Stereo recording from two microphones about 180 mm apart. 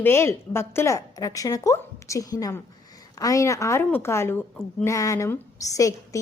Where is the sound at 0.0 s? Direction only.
15° left (ahead or behind).